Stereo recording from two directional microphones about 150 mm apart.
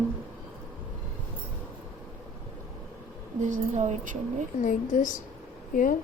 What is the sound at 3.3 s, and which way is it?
A woman's voice, 55° right (ahead or behind).